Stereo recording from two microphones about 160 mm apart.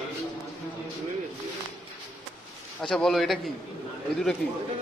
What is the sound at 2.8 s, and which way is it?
Speech, 5° left (ahead or behind).